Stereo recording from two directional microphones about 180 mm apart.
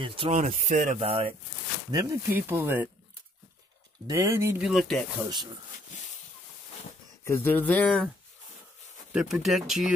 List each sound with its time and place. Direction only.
0.0 s speech: 30° right (ahead or behind); by 2.9 s 10° right (ahead or behind)
4.1 s speech: 15° right (ahead or behind); by 5.0 s centre (ahead or behind)
7.2 s speech: 10° left (ahead or behind)
9.1 s speech: 5° right (ahead or behind)